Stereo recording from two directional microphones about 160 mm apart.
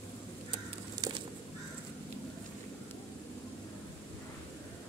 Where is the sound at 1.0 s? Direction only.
25° right (ahead or behind).